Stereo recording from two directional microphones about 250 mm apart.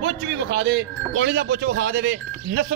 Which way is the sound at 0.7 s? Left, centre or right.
Right.